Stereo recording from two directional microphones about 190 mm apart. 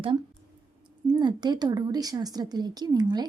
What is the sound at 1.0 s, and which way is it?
Speech, 20° right (ahead or behind).